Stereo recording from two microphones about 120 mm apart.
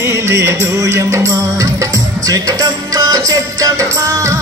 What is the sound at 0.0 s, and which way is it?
Music, 25° right (ahead or behind).